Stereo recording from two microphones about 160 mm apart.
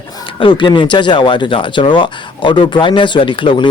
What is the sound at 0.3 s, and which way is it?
Speech, 30° left (ahead or behind).